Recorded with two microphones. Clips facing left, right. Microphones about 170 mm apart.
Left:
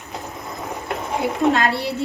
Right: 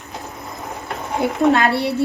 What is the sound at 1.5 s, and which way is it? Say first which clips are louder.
Speech: right 3 dB; 60° right (ahead or behind).